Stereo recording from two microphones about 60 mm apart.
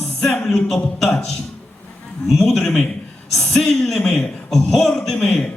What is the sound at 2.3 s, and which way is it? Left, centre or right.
Speech, centre.